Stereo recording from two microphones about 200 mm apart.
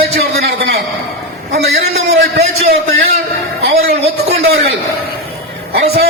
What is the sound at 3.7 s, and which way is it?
Speech, 30° right (ahead or behind).